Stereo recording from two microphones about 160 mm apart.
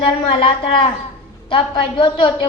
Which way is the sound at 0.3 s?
35° left (ahead or behind).